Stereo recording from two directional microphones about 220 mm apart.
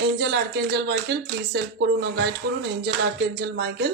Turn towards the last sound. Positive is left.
turn(degrees=-45)  # may be behind; listen again after turning